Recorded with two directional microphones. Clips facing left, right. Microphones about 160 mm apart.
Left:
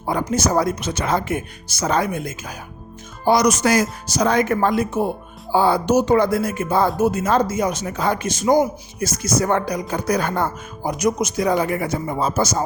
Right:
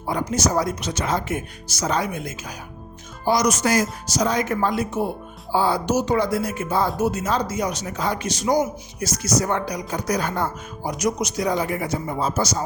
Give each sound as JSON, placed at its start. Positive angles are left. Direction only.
{"t": 0.0, "sound": "speech", "side_deg": 55}
{"t": 3.2, "sound": "speech", "side_deg": 65}